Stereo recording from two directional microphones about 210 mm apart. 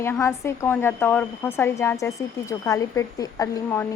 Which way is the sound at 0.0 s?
10° left (ahead or behind).